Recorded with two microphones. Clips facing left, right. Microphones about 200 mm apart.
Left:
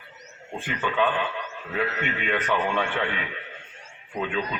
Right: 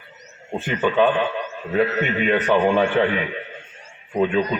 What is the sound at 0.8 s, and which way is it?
A man's voice, 40° right (ahead or behind).